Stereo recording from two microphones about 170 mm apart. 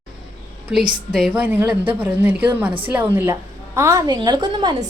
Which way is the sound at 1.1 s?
5° right (ahead or behind).